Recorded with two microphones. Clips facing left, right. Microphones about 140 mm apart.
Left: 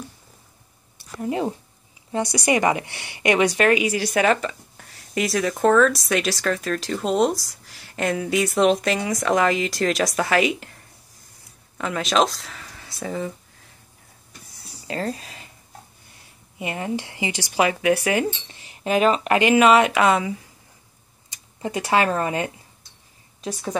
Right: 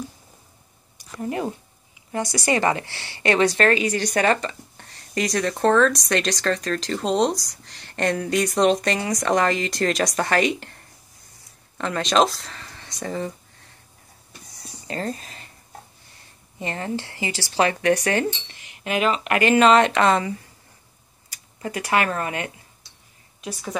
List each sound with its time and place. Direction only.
2.1 s a woman's voice: 20° left (ahead or behind); by 10.8 s 5° left (ahead or behind)
11.8 s speech: 5° left (ahead or behind)
14.9 s speech: 5° left (ahead or behind)
16.5 s speech: 10° left (ahead or behind)
18.5 s a sound: 35° left (ahead or behind)
19.4 s speech: 10° left (ahead or behind)
21.3 s speech: 25° left (ahead or behind)